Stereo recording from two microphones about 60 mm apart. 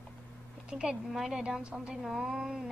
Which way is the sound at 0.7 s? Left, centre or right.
Centre.